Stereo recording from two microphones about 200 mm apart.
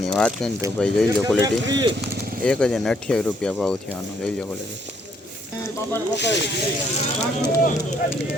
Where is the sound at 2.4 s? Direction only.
5° left (ahead or behind).